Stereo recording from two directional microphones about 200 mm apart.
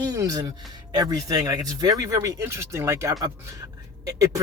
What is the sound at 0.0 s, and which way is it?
Speech, 20° right (ahead or behind).